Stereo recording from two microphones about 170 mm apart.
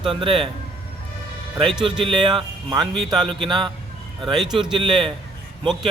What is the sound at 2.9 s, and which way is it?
Speech, centre (ahead or behind).